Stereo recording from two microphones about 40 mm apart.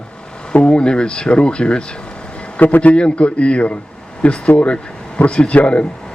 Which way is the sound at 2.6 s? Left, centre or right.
Left.